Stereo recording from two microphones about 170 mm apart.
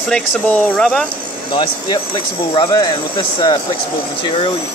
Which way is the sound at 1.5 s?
30° left (ahead or behind).